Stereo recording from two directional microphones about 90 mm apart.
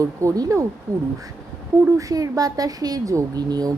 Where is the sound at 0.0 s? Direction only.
35° right (ahead or behind).